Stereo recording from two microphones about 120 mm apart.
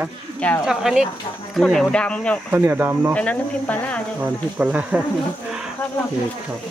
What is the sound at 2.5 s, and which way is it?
Speech, 20° right (ahead or behind).